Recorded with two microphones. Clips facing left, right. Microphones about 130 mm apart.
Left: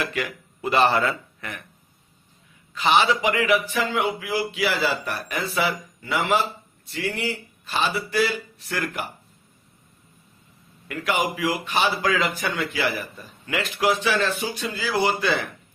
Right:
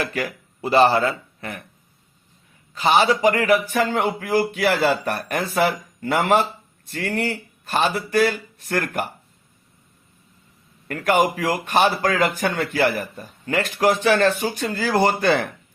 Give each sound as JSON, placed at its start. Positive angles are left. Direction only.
{"t": 0.0, "sound": "speech", "side_deg": -35}
{"t": 2.7, "sound": "a man's voice", "side_deg": -40}
{"t": 10.8, "sound": "a man's voice", "side_deg": -50}